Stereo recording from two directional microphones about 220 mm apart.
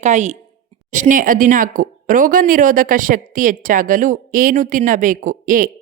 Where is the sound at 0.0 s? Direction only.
35° right (ahead or behind).